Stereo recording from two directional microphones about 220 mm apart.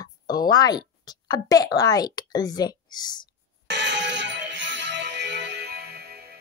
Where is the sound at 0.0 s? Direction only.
20° left (ahead or behind).